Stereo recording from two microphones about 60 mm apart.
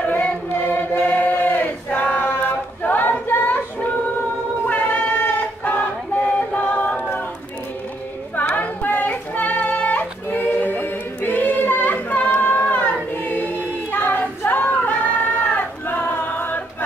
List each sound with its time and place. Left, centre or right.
0.0 s choir: left
4.6 s choir: left
8.4 s child singing: left
12.4 s a sound: left
13.2 s choir: left
13.9 s a sound: left